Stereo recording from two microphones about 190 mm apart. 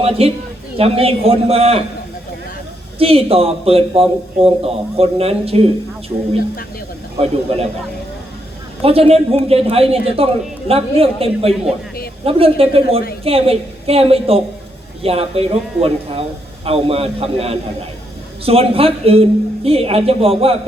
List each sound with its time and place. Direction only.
0.0 s a man's voice: 30° right (ahead or behind)
3.0 s a man's voice: 30° right (ahead or behind)
7.5 s a man's voice: 30° right (ahead or behind)
8.8 s a man's voice: 30° right (ahead or behind)